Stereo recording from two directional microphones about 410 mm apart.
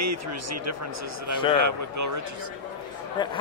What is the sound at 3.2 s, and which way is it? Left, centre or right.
Speech, centre.